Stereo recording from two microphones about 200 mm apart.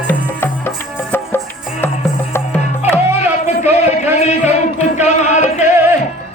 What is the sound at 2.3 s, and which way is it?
Music, 10° left (ahead or behind).